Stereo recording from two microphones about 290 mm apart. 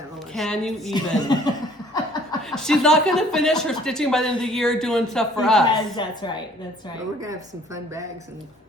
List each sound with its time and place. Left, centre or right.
0.3 s speech: centre
1.2 s a sound: centre
2.5 s speech: centre
6.0 s a woman's voice: centre